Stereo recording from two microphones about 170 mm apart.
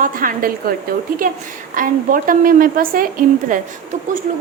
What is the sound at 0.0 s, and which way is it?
Speech, 55° right (ahead or behind).